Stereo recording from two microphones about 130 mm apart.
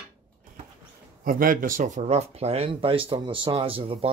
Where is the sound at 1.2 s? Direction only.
90° right; by 3.9 s 45° right (ahead or behind).